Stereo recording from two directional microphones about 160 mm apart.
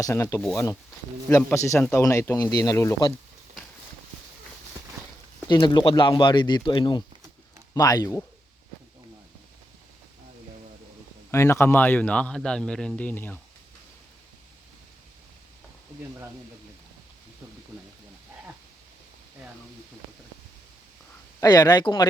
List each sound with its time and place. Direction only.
0.0 s a man's voice: 20° left (ahead or behind)
5.5 s speech: 30° left (ahead or behind)
11.3 s a man's voice: 15° left (ahead or behind)
21.4 s speech: 25° left (ahead or behind)